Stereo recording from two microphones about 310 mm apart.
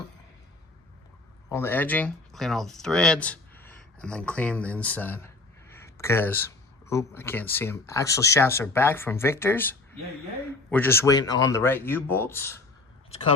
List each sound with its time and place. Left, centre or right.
1.5 s speech: centre
13.1 s speech: centre